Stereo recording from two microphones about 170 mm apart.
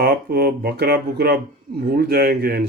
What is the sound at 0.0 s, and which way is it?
Speech, 70° right (ahead or behind).